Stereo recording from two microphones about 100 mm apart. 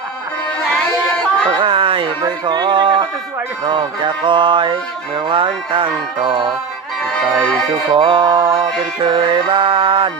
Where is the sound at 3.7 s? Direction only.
55° right (ahead or behind).